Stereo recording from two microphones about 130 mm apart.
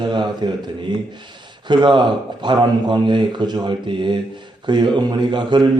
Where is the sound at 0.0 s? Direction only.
35° right (ahead or behind).